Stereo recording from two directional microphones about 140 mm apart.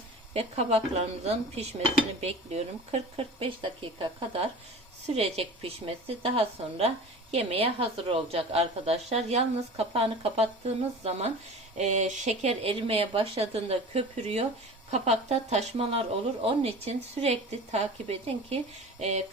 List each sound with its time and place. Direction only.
0.3 s a woman's voice: 45° right (ahead or behind)